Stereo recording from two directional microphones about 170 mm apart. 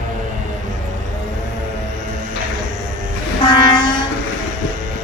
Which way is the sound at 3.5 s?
25° left (ahead or behind).